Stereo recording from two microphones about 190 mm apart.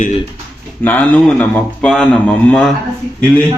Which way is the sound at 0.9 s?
10° left (ahead or behind).